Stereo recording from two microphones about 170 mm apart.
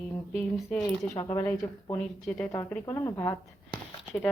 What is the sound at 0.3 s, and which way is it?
Speech, 5° left (ahead or behind).